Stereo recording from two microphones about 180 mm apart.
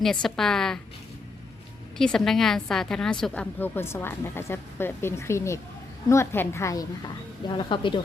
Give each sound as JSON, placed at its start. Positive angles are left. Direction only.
{"t": 0.0, "sound": "a woman's voice", "side_deg": 5}
{"t": 2.0, "sound": "a woman's voice", "side_deg": 5}